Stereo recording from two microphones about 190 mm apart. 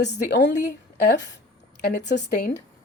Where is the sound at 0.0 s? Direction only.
65° left (ahead or behind).